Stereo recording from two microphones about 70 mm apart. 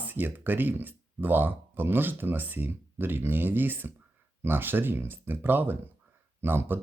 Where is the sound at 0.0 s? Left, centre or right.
Right.